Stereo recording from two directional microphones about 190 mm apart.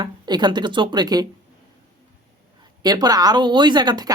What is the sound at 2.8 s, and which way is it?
Speech, 20° right (ahead or behind).